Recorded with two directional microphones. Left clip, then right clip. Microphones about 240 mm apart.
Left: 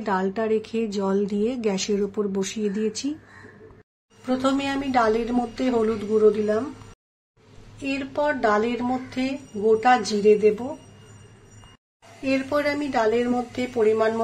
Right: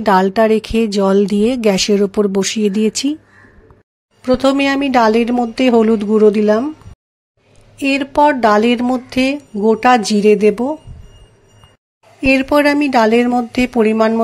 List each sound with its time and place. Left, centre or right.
0.0 s a woman's voice: right
4.2 s a woman's voice: right
7.8 s a woman's voice: right
12.3 s a woman's voice: right